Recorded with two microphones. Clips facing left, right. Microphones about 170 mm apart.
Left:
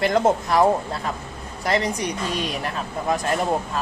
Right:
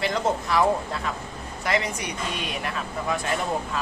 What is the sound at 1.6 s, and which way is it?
Speech, 35° left (ahead or behind).